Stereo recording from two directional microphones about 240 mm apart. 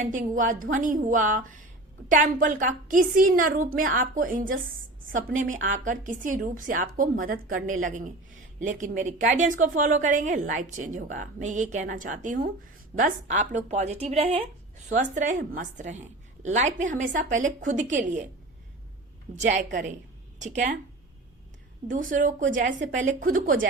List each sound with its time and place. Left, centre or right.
0.0 s a woman's voice: right
19.4 s a woman's voice: right
21.8 s a woman's voice: right